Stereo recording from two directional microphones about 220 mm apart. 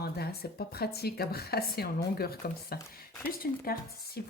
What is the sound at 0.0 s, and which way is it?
Speech, 45° left (ahead or behind).